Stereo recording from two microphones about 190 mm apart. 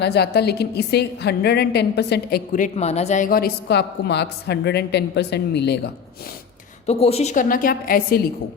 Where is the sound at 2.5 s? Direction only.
40° left (ahead or behind); by 6.3 s 60° left (ahead or behind).